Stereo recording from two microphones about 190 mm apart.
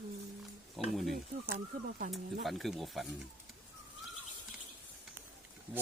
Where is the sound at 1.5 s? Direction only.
45° right (ahead or behind).